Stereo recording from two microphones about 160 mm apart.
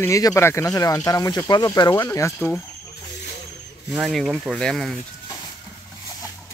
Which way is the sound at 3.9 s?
Centre (ahead or behind).